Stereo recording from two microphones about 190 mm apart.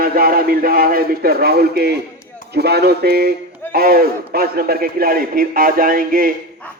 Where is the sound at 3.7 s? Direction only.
50° right (ahead or behind).